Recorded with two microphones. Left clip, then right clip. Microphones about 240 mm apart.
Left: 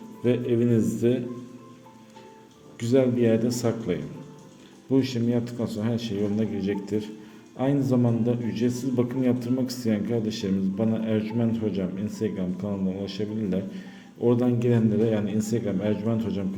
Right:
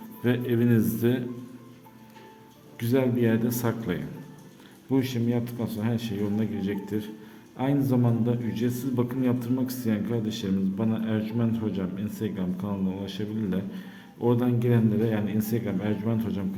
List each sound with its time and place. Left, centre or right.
0.2 s speech: centre
2.8 s a man's voice: centre